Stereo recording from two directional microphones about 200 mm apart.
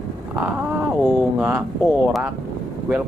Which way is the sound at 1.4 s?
5° right (ahead or behind).